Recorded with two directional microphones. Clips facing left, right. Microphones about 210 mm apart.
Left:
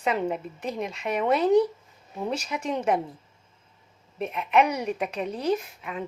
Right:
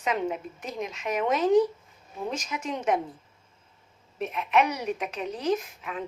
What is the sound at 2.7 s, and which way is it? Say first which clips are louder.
Speech: left 2 dB; 10° left (ahead or behind).